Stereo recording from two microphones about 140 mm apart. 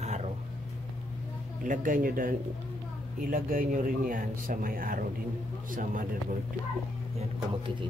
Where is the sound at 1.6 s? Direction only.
75° right (ahead or behind); by 5.0 s 90° right.